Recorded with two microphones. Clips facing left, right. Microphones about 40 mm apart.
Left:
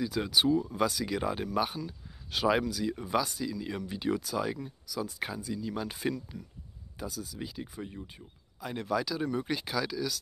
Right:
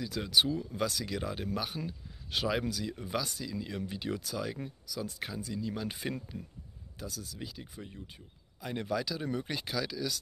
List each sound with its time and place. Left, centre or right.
0.0 s speech: centre
2.3 s speech: centre
6.3 s speech: right
7.0 s speech: centre